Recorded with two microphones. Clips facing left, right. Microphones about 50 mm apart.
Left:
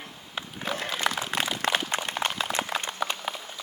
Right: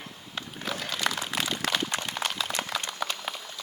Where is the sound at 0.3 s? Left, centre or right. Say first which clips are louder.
Left 2 dB; centre.